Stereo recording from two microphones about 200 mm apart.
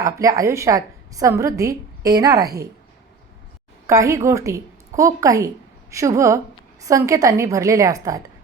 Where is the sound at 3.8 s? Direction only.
15° right (ahead or behind).